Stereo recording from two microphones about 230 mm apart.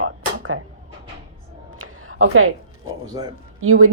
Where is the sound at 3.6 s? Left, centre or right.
Right.